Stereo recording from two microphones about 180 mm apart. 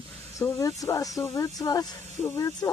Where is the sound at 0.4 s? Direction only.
15° left (ahead or behind).